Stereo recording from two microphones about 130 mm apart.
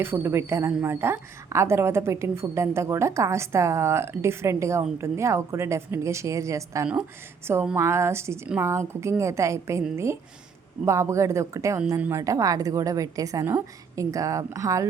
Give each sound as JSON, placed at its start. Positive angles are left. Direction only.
{"t": 0.0, "sound": "a woman's voice", "side_deg": -15}